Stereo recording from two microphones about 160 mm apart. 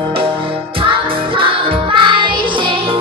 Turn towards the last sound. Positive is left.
turn(degrees=-30)  # may be behind; listen again after turning